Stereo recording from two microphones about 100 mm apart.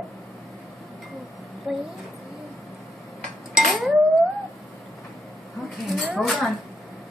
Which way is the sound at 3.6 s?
Centre (ahead or behind).